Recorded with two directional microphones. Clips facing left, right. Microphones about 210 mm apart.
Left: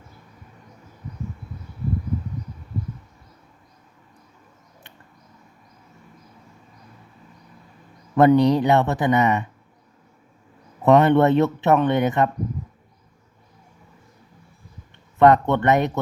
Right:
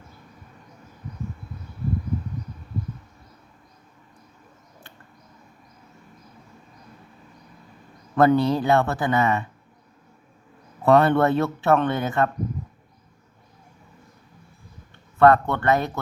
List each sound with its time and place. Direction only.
8.1 s speech: 15° left (ahead or behind)
10.8 s speech: 20° left (ahead or behind)
15.2 s speech: 20° left (ahead or behind)